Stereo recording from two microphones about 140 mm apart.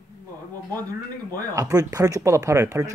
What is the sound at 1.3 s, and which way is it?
Speech, 25° right (ahead or behind).